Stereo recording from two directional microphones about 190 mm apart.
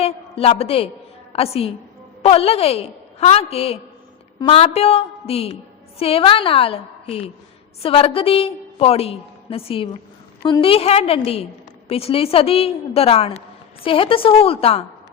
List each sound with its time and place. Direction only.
0.0 s a woman's voice: 30° left (ahead or behind)